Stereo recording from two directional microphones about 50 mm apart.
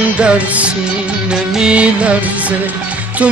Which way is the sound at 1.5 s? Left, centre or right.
Centre.